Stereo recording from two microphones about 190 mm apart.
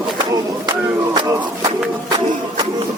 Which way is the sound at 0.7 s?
20° right (ahead or behind).